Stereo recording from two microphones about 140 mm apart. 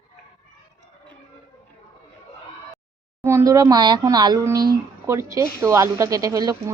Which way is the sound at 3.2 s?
20° right (ahead or behind).